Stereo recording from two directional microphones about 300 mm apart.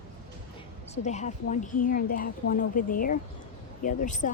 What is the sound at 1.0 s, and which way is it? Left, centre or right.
A woman's voice, left.